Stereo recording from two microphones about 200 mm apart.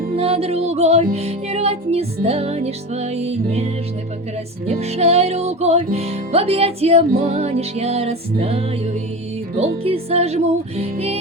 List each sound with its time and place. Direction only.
0.2 s music: 30° right (ahead or behind)